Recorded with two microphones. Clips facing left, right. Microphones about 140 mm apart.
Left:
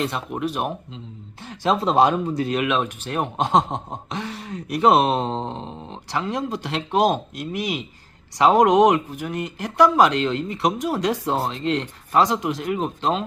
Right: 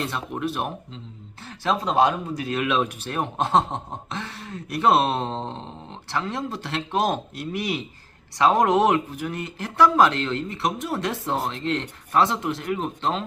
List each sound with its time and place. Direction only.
0.0 s speech: 20° left (ahead or behind)
1.9 s speech: 30° left (ahead or behind)
2.6 s speech: centre (ahead or behind)
3.2 s speech: 20° left (ahead or behind)
8.4 s speech: 20° left (ahead or behind)
9.1 s speech: centre (ahead or behind)
10.0 s speech: 15° left (ahead or behind)